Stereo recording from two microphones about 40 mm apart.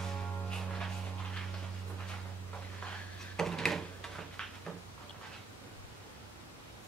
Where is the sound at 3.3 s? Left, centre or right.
Centre.